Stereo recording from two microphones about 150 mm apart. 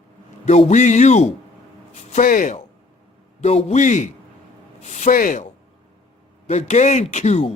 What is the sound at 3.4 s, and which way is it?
Speech, 45° left (ahead or behind).